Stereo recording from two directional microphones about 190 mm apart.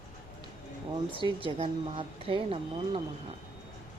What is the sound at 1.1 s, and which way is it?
Speech, 25° right (ahead or behind).